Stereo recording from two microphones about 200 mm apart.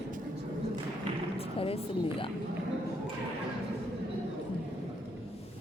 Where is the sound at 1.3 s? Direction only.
30° left (ahead or behind).